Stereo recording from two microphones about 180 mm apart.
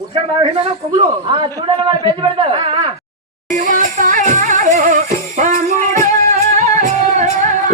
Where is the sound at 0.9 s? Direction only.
30° right (ahead or behind).